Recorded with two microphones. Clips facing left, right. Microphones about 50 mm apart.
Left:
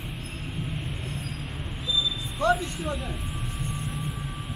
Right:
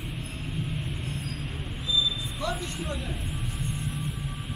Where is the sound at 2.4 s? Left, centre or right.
Left.